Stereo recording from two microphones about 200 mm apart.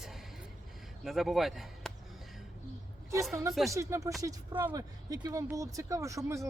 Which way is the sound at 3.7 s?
15° right (ahead or behind).